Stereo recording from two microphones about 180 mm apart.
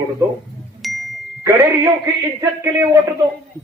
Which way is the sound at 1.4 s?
15° right (ahead or behind).